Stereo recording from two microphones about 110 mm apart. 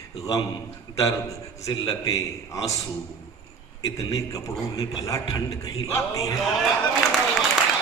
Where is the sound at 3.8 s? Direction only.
30° left (ahead or behind).